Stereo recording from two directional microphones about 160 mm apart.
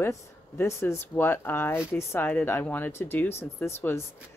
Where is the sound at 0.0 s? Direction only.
15° left (ahead or behind).